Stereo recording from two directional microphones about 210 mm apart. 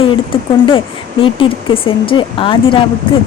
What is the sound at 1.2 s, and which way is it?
A woman's voice, 25° left (ahead or behind).